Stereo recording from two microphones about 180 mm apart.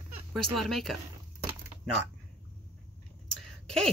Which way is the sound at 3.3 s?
5° left (ahead or behind).